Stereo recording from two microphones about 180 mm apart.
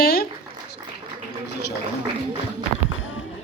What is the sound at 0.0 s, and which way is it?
Dog, 60° left (ahead or behind).